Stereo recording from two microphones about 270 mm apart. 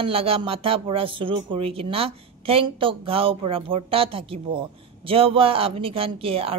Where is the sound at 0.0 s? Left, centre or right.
Right.